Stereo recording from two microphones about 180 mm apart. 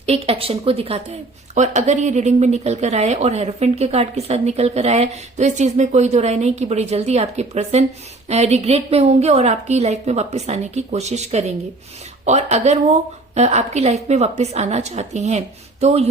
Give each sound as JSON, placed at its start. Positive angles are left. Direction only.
{"t": 0.0, "sound": "a woman's voice", "side_deg": -35}